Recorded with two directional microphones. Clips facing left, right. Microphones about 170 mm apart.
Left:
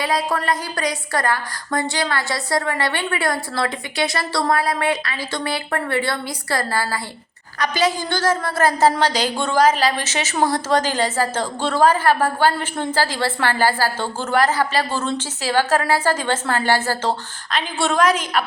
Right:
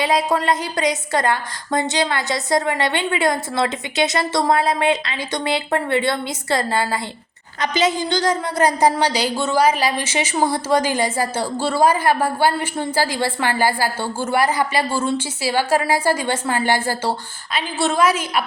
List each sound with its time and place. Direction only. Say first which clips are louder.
0.0 s a woman's voice: right 3 dB; 20° right (ahead or behind)